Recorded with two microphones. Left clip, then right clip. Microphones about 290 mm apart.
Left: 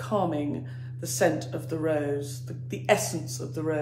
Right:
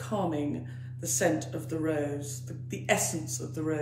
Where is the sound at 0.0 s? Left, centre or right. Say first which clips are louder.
Left 4 dB; centre.